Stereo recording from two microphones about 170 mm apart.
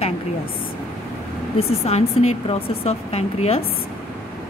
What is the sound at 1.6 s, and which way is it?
Speech, 35° left (ahead or behind).